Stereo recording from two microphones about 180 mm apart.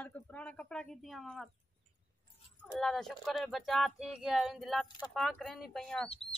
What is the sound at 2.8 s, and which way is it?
Speech, centre (ahead or behind).